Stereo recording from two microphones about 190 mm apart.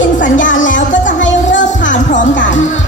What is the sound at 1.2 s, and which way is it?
Music, 75° left (ahead or behind).